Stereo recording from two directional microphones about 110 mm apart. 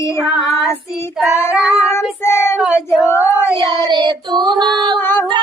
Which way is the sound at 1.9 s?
25° left (ahead or behind).